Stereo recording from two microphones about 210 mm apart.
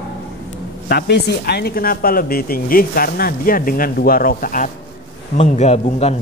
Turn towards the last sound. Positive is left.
turn(degrees=30)  # may be behind; listen again after turning